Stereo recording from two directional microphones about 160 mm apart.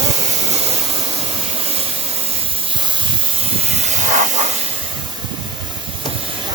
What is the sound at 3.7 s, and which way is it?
Hiss, 45° right (ahead or behind).